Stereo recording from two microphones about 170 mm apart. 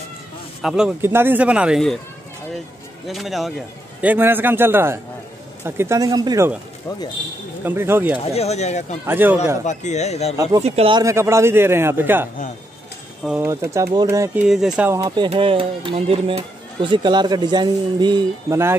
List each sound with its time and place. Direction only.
0.6 s a man's voice: 5° right (ahead or behind)
3.1 s a man's voice: centre (ahead or behind); by 6.5 s 20° right (ahead or behind)
7.6 s a man's voice: 15° right (ahead or behind)
8.3 s speech: 40° left (ahead or behind)
9.0 s a man's voice: 10° right (ahead or behind)
9.7 s speech: 40° left (ahead or behind)
10.3 s speech: 20° right (ahead or behind)
10.6 s speech: 35° right (ahead or behind)
11.0 s a man's voice: 15° right (ahead or behind)
13.4 s a man's voice: 15° right (ahead or behind)
14.4 s speech: 5° right (ahead or behind)
15.2 s speech: 30° right (ahead or behind)